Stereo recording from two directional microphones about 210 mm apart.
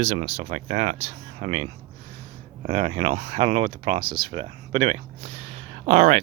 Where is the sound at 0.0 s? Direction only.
30° right (ahead or behind).